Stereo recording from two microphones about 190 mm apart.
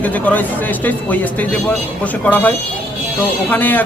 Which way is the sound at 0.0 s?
10° left (ahead or behind).